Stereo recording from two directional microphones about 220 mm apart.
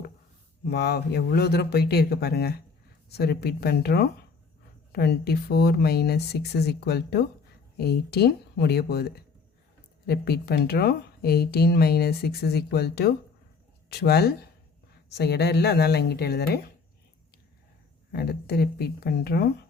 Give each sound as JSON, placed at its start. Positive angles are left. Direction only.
{"t": 0.6, "sound": "speech", "side_deg": 45}
{"t": 18.1, "sound": "speech", "side_deg": 45}